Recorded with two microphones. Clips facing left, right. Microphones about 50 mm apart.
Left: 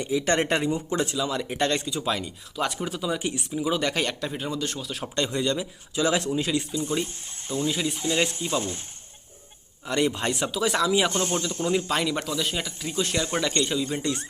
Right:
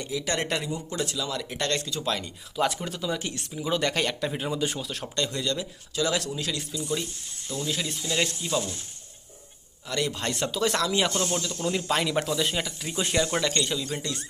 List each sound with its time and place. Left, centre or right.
0.0 s speech: left; by 4.8 s centre
4.8 s speech: centre
5.1 s speech: centre
7.7 s speech: centre
7.9 s speech: left
9.8 s speech: left
10.3 s speech: centre
11.1 s speech: left
11.9 s speech: centre
13.4 s speech: centre